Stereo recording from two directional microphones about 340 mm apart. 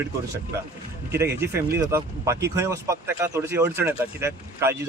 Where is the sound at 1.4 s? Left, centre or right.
Centre.